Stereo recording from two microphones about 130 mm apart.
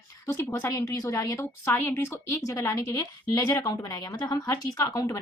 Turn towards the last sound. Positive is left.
turn(degrees=25)  # may be behind; listen again after turning